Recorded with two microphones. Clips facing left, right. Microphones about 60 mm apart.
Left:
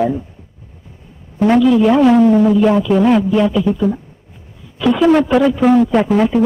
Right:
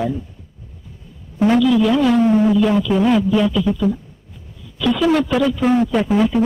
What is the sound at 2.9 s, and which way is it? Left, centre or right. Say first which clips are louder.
Speech: left 3 dB; centre.